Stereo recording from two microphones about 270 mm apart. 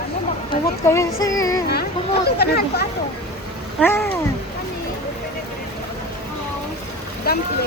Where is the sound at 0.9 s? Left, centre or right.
Centre.